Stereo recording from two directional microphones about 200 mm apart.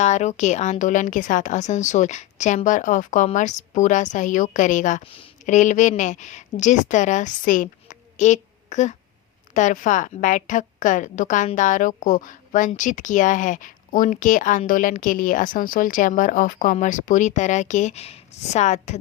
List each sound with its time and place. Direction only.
0.0 s a woman's voice: 35° left (ahead or behind)